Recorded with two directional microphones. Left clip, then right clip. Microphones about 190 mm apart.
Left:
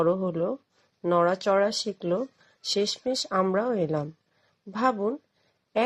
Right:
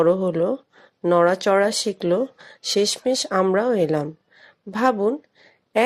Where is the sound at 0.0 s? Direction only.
40° right (ahead or behind).